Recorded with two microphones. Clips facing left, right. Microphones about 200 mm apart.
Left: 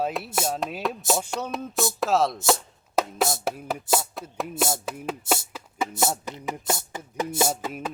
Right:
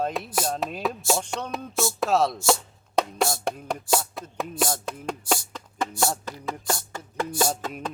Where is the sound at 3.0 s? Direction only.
5° left (ahead or behind).